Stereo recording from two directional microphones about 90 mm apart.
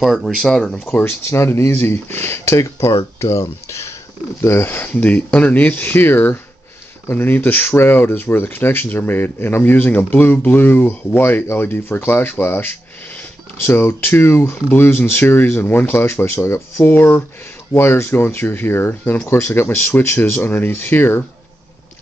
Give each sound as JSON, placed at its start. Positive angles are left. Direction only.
{"t": 0.0, "sound": "speech", "side_deg": 0}
{"t": 0.9, "sound": "speech", "side_deg": 30}